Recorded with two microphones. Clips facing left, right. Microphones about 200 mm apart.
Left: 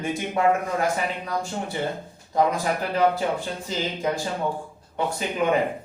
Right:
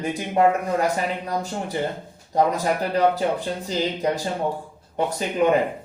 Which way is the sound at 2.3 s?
40° right (ahead or behind).